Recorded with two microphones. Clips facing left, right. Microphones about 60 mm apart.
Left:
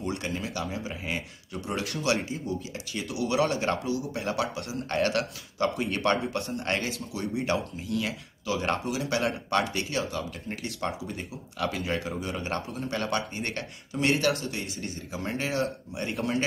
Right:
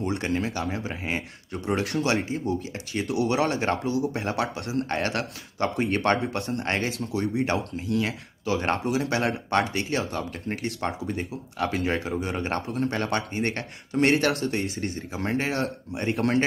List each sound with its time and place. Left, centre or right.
0.2 s speech: right
4.8 s speech: right
6.6 s speech: right
12.2 s a man's voice: right
12.9 s speech: right